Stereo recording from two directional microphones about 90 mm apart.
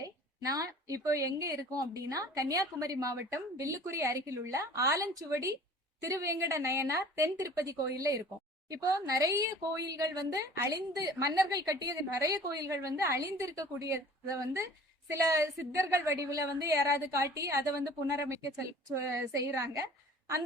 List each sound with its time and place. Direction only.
0.0 s a woman's voice: 40° right (ahead or behind)